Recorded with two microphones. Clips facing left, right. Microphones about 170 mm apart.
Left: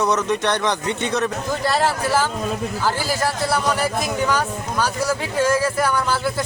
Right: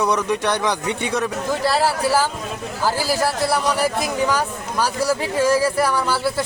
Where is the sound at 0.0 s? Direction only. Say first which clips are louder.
Even; 10° right (ahead or behind).